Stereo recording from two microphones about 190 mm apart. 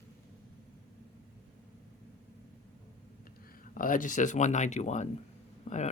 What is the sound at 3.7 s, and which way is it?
Speech, 45° left (ahead or behind).